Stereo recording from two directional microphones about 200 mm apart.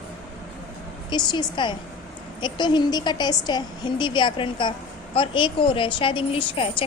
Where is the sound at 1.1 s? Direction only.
20° left (ahead or behind).